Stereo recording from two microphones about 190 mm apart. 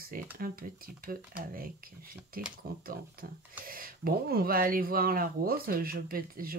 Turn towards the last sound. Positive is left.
turn(degrees=-50)  # may be behind; listen again after turning